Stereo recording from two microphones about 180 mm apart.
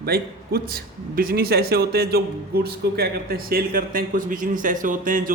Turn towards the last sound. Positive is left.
turn(degrees=-50)  # may be behind; listen again after turning